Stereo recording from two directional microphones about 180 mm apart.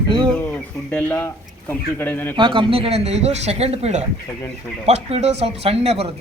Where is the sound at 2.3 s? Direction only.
25° right (ahead or behind).